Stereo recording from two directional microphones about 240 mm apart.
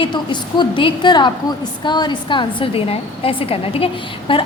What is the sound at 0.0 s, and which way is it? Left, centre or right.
A woman's voice, centre.